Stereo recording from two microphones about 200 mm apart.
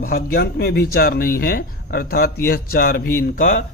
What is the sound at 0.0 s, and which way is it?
Speech, 45° left (ahead or behind).